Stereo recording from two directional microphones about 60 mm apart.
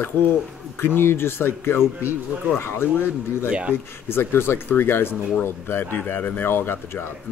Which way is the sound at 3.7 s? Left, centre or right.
Left.